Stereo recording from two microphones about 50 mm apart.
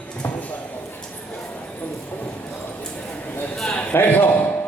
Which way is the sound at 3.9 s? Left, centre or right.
Left.